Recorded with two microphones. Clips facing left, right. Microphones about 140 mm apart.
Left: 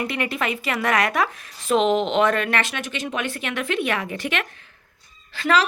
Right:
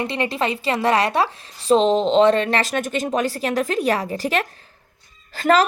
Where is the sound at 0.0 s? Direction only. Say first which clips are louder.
Right 3 dB; 30° right (ahead or behind).